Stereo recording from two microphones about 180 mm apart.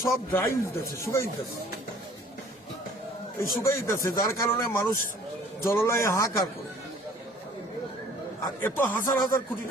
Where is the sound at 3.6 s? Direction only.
15° left (ahead or behind).